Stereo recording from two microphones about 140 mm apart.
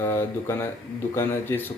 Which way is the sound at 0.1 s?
15° left (ahead or behind).